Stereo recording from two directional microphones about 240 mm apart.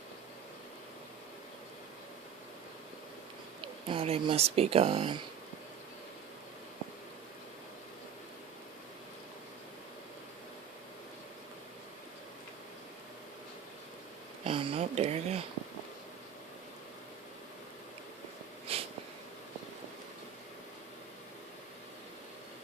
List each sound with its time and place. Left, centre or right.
3.8 s speech: right
14.4 s a sound: right
18.7 s snort: right